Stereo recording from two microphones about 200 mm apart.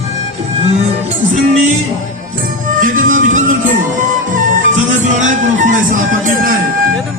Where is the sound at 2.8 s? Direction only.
40° right (ahead or behind).